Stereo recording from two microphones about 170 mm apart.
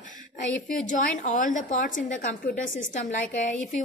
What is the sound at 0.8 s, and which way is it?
A woman's voice, 45° left (ahead or behind).